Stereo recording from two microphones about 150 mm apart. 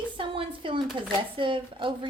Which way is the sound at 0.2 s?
35° right (ahead or behind).